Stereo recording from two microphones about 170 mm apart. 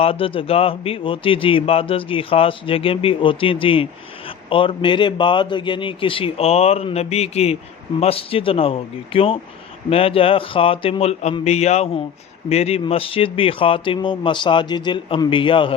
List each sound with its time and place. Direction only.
0.0 s a man's voice: 35° left (ahead or behind)